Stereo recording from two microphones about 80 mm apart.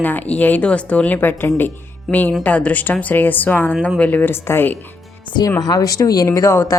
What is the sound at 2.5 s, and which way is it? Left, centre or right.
A woman's voice, centre.